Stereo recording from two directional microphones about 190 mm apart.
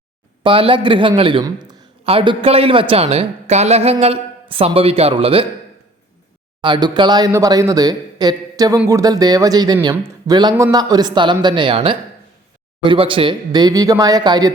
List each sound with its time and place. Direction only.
0.4 s a man's voice: 30° right (ahead or behind)
6.6 s a man's voice: 25° right (ahead or behind)